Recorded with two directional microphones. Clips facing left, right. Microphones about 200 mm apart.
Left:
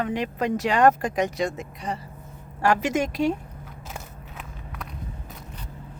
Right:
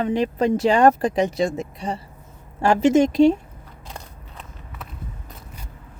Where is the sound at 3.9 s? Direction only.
5° left (ahead or behind).